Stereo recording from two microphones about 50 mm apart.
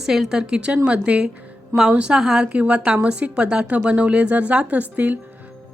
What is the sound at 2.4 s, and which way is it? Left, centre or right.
A woman's voice, right.